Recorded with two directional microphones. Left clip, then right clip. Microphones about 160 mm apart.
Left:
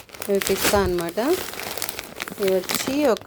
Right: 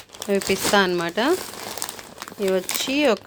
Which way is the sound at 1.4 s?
20° left (ahead or behind).